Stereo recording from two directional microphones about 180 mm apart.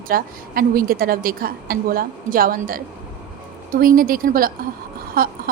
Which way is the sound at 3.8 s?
55° right (ahead or behind).